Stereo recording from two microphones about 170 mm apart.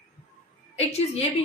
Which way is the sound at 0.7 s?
40° left (ahead or behind).